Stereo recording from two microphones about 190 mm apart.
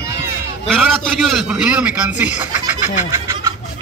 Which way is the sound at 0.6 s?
Centre (ahead or behind).